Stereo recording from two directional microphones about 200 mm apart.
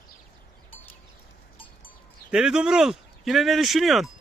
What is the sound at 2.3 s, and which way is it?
Speech, 5° right (ahead or behind).